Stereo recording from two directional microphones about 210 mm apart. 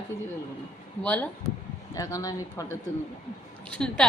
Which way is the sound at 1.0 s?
10° left (ahead or behind).